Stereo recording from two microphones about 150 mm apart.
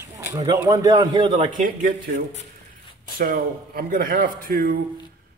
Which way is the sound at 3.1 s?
90° right.